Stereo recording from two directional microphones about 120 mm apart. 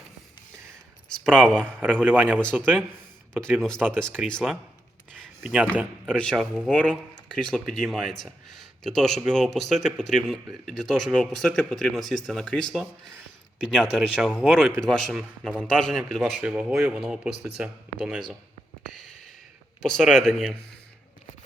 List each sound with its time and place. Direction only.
1.1 s speech: 5° left (ahead or behind)
1.6 s a man's voice: 15° right (ahead or behind)
4.3 s speech: 5° left (ahead or behind)
5.4 s a man's voice: 5° right (ahead or behind)
6.1 s a man's voice: 5° left (ahead or behind)
19.8 s speech: centre (ahead or behind)